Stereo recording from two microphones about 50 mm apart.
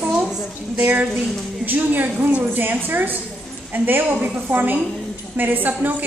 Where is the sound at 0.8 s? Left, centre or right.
Right.